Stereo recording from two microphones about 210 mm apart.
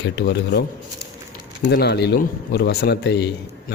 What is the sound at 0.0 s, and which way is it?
A man's voice, 55° left (ahead or behind).